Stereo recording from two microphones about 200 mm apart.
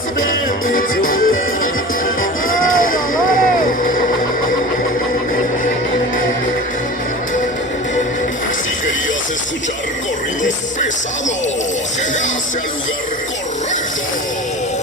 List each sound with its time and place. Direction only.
0.2 s music: 45° left (ahead or behind)
2.7 s vehicle: 45° left (ahead or behind)